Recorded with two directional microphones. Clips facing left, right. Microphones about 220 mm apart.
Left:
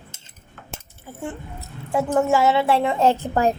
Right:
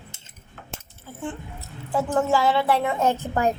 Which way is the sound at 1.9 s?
25° left (ahead or behind).